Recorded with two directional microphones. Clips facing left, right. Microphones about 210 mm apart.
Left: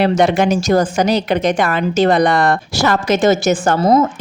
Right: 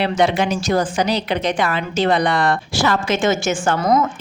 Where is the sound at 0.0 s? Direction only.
45° left (ahead or behind); by 4.1 s 30° left (ahead or behind).